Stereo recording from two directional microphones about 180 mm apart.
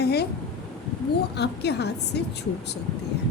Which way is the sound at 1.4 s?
65° left (ahead or behind).